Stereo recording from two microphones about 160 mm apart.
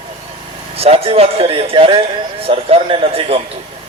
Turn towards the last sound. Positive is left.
turn(degrees=-35)  # may be behind; listen again after turning